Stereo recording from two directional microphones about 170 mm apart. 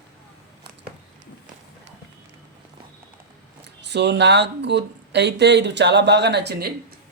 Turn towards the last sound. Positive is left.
turn(degrees=-65)  # may be behind; listen again after turning